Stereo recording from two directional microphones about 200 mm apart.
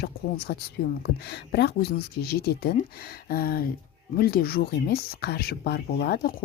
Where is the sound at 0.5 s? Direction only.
55° left (ahead or behind).